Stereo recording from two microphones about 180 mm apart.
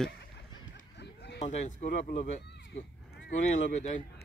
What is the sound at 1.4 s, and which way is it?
Speech, 40° left (ahead or behind).